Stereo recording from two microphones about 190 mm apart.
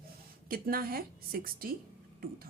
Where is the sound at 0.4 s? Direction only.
50° right (ahead or behind).